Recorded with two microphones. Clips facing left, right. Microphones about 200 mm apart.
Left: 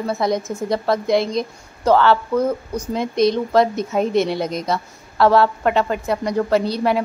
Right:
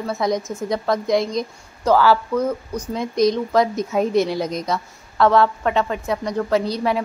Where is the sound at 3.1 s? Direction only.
25° left (ahead or behind).